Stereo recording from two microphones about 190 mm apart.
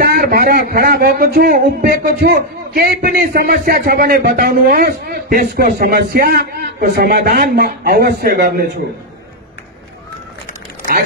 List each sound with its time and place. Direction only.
0.0 s a man's voice: 50° right (ahead or behind)